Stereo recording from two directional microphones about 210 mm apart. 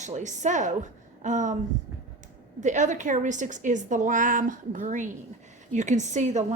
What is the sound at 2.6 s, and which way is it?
A woman's voice, 35° right (ahead or behind).